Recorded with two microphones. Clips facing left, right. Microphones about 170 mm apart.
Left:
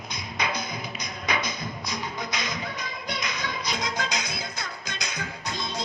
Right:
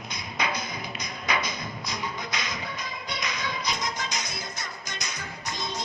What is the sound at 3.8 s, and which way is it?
Music, 65° left (ahead or behind).